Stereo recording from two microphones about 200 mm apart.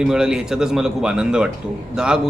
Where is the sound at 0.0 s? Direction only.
5° right (ahead or behind).